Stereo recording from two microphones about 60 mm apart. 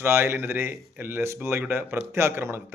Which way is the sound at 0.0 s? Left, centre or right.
Right.